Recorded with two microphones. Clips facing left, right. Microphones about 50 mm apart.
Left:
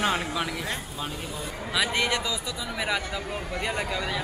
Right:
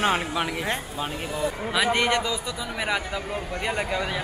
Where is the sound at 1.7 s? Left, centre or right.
Centre.